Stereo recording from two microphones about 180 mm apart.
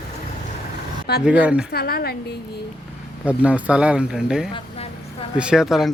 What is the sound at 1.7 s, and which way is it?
Speech, 60° left (ahead or behind).